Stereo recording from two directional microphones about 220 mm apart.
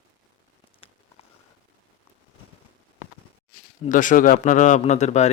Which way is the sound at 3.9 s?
35° left (ahead or behind).